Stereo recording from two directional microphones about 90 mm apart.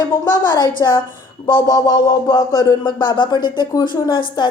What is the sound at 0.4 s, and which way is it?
Music, 55° left (ahead or behind).